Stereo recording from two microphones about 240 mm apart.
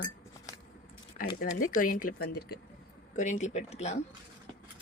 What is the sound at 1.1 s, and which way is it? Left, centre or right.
Speech, left.